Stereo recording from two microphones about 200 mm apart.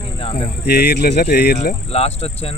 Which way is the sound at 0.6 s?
55° left (ahead or behind).